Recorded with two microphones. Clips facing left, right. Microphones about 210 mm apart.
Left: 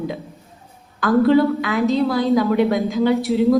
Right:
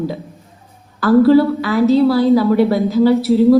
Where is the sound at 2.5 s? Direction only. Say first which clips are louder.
Right 4 dB; 15° left (ahead or behind).